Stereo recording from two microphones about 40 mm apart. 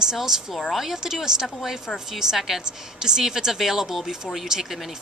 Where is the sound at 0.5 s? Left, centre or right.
Centre.